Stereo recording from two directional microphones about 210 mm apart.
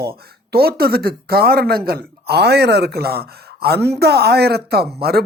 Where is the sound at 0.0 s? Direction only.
45° right (ahead or behind).